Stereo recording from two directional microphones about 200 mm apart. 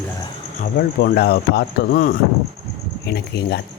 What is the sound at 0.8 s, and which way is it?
Speech, 50° left (ahead or behind).